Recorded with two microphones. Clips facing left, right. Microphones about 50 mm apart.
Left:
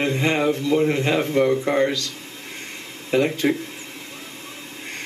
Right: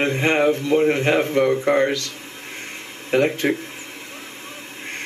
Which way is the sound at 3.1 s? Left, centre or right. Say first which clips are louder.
Right 1 dB; right.